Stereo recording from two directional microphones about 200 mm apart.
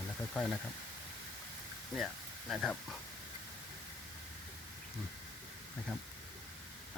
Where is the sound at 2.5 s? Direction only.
Centre (ahead or behind).